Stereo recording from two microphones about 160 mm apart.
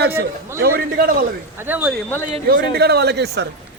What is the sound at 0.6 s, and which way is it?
Speech, 70° right (ahead or behind).